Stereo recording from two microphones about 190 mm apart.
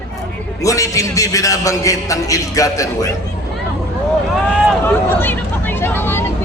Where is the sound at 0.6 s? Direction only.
15° left (ahead or behind).